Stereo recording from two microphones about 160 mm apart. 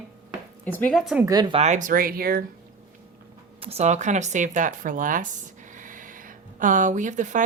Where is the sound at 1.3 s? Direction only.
25° right (ahead or behind).